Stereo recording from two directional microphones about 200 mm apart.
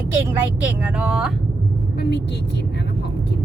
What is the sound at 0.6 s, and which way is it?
Speech, 5° right (ahead or behind).